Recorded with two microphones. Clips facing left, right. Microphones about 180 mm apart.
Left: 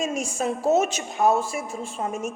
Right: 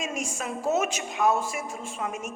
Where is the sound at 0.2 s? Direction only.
30° left (ahead or behind).